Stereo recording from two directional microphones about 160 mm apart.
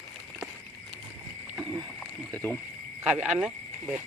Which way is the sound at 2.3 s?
10° left (ahead or behind).